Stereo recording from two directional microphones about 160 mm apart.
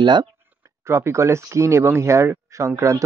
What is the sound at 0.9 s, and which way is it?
Speech, 15° right (ahead or behind).